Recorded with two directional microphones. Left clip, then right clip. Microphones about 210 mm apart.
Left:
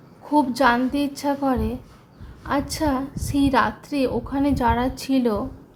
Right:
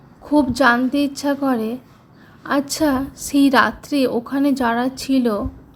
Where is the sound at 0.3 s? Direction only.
15° right (ahead or behind).